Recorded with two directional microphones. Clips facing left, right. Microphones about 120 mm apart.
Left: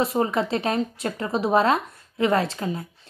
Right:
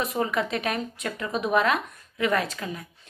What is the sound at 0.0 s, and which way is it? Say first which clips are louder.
A woman's voice: left 4 dB; 30° left (ahead or behind).